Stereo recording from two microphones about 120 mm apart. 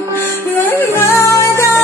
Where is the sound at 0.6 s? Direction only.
15° left (ahead or behind).